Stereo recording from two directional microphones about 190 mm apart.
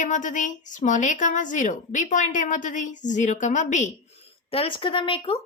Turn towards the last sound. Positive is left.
turn(degrees=25)  # may be behind; listen again after turning